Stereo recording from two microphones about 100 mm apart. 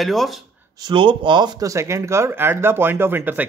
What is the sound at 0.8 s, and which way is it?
Speech, 55° right (ahead or behind).